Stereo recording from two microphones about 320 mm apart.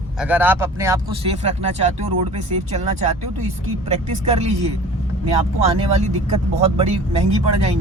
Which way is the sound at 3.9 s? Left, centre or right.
Right.